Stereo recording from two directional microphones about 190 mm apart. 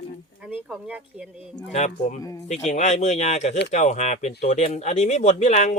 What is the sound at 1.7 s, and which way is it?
Speech, 35° left (ahead or behind).